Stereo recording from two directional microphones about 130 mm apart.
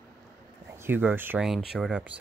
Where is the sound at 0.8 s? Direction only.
15° right (ahead or behind).